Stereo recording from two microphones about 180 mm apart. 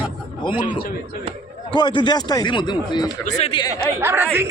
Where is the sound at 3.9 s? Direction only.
10° right (ahead or behind).